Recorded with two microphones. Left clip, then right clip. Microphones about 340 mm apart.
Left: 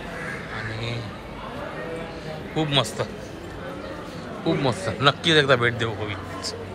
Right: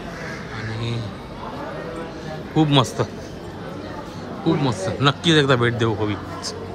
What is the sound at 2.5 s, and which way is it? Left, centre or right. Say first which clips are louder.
Speech: right 5 dB; centre.